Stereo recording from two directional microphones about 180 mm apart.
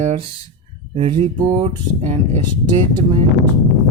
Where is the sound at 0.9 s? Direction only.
30° right (ahead or behind).